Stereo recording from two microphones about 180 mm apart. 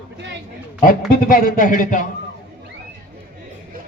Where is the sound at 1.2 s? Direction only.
50° left (ahead or behind).